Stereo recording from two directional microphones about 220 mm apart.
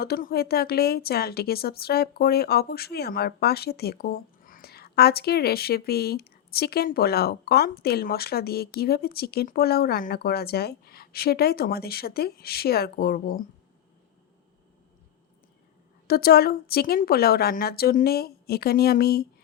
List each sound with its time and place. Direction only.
0.0 s a woman's voice: 45° left (ahead or behind)
16.0 s a woman's voice: 45° left (ahead or behind)